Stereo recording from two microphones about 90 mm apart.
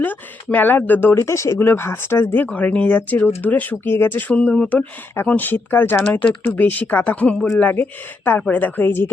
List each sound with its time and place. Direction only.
0.0 s speech: 20° left (ahead or behind)